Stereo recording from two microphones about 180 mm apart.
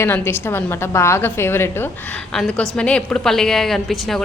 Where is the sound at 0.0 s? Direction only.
10° left (ahead or behind).